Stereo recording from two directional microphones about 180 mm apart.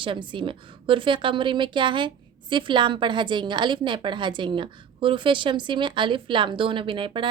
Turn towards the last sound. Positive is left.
turn(degrees=-25)  # may be behind; listen again after turning